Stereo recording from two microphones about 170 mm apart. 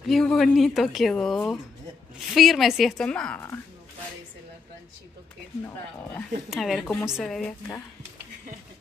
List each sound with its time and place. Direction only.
0.1 s a woman's voice: centre (ahead or behind)
3.3 s speech: 15° left (ahead or behind)
6.5 s a woman's voice: centre (ahead or behind)